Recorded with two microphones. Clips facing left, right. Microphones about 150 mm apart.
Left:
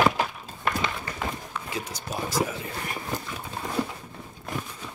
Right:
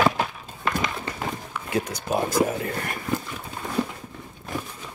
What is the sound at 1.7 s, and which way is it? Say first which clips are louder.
Speech: right 10 dB; 55° right (ahead or behind).